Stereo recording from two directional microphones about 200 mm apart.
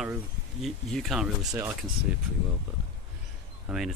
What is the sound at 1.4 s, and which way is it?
Speech, 15° right (ahead or behind).